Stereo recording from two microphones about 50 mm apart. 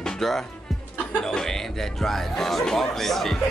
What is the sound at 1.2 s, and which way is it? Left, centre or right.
Chuckle, centre.